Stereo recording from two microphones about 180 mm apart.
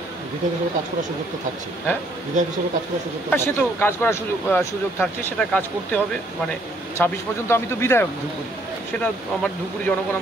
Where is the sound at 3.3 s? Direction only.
15° left (ahead or behind).